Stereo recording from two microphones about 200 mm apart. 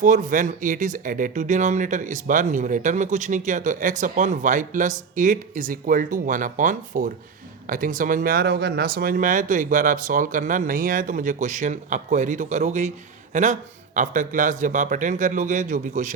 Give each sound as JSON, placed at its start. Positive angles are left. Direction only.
{"t": 0.0, "sound": "speech", "side_deg": -40}